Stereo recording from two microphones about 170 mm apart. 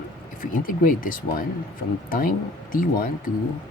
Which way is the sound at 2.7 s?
55° left (ahead or behind).